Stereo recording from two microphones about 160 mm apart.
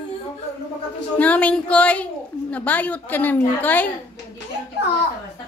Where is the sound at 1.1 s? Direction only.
10° left (ahead or behind).